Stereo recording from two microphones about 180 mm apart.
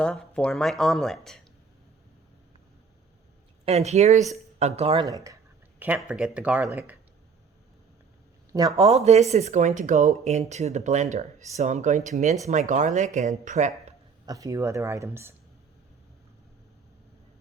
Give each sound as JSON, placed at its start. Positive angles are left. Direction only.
{"t": 0.0, "sound": "speech", "side_deg": 5}
{"t": 3.7, "sound": "speech", "side_deg": -35}
{"t": 5.0, "sound": "speech", "side_deg": -20}
{"t": 5.8, "sound": "speech", "side_deg": -5}
{"t": 8.5, "sound": "speech", "side_deg": -25}
{"t": 14.3, "sound": "speech", "side_deg": -20}